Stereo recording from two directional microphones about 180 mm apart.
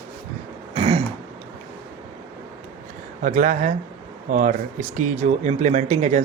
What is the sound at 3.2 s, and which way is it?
Speech, 45° right (ahead or behind).